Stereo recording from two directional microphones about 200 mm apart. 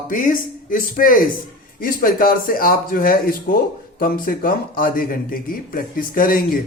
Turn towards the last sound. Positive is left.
turn(degrees=45)  # may be behind; listen again after turning